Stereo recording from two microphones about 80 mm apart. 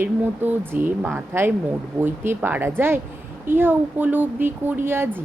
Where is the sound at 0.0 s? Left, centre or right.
Right.